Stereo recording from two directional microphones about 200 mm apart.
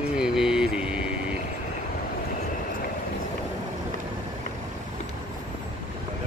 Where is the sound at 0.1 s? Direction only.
5° right (ahead or behind).